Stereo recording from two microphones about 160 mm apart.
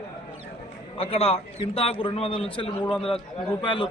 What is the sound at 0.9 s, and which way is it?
A man's voice, 35° left (ahead or behind).